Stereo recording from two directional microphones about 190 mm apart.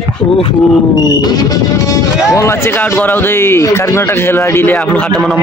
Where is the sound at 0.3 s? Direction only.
30° left (ahead or behind).